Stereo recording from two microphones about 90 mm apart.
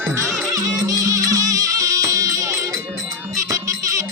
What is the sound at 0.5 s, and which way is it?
Music, 40° right (ahead or behind).